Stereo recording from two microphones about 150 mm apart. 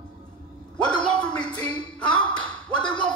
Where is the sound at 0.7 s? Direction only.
5° left (ahead or behind).